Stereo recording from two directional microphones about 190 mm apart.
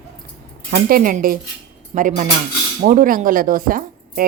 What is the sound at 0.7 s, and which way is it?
Speech, 50° right (ahead or behind).